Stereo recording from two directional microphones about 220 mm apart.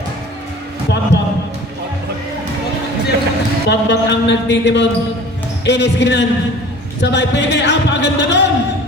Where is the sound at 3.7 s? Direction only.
50° left (ahead or behind).